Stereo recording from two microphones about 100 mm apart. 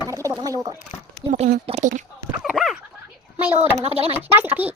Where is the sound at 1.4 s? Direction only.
90° right.